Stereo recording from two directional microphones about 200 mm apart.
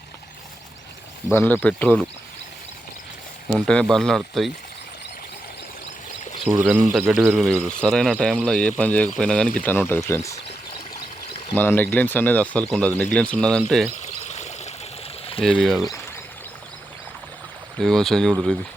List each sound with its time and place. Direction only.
1.3 s speech: 10° left (ahead or behind)
3.5 s speech: 5° left (ahead or behind)
6.4 s speech: 5° right (ahead or behind); by 10.3 s 15° left (ahead or behind)
11.5 s speech: 10° left (ahead or behind)
13.9 s stream: 35° left (ahead or behind)
15.4 s speech: 5° left (ahead or behind)
17.7 s speech: centre (ahead or behind)